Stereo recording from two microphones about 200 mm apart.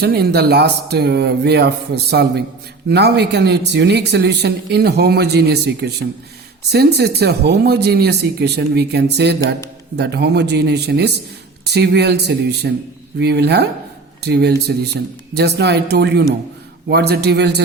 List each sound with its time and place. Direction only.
0.0 s speech: 50° right (ahead or behind)